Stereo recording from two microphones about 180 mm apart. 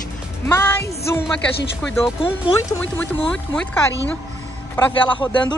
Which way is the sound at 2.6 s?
10° left (ahead or behind).